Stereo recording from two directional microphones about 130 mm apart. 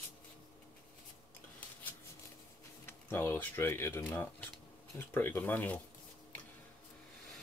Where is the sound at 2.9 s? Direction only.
15° left (ahead or behind).